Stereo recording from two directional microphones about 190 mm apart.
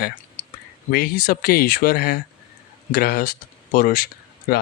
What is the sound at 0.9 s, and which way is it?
Speech, 50° left (ahead or behind).